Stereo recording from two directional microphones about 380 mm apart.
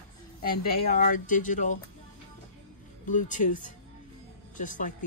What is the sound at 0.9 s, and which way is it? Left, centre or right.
Speech, left.